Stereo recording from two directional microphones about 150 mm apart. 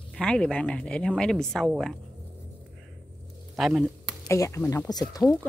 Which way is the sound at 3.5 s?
Centre (ahead or behind).